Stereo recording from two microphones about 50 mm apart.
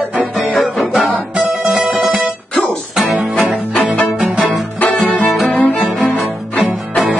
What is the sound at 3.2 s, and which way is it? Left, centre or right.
Music, centre.